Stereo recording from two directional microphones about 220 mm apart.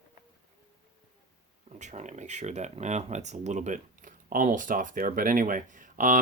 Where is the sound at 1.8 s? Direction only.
30° right (ahead or behind).